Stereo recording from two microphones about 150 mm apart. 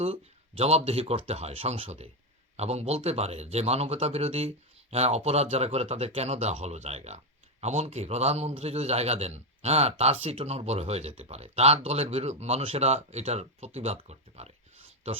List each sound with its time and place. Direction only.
0.0 s a man's voice: 40° right (ahead or behind)